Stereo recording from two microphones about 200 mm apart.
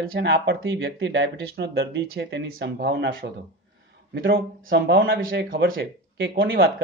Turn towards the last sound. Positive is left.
turn(degrees=-70)  # may be behind; listen again after turning